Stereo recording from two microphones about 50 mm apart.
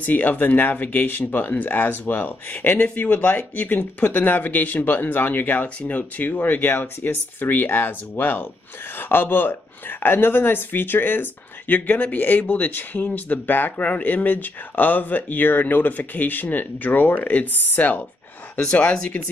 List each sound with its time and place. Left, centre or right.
0.0 s speech: left
18.6 s speech: left